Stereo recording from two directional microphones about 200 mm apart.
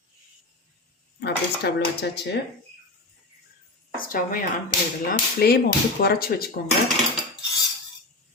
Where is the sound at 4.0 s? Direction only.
45° left (ahead or behind).